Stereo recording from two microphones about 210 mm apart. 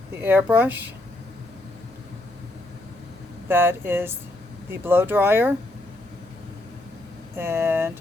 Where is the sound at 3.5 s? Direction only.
10° right (ahead or behind).